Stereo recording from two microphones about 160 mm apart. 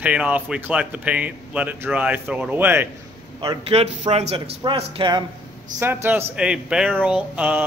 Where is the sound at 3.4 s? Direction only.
35° right (ahead or behind).